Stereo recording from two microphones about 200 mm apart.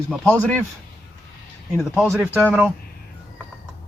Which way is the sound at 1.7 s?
Centre (ahead or behind).